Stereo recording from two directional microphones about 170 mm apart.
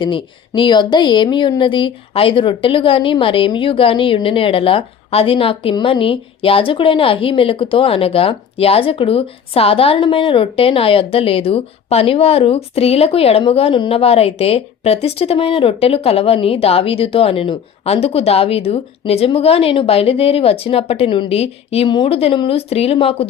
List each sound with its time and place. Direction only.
0.0 s speech: 30° left (ahead or behind)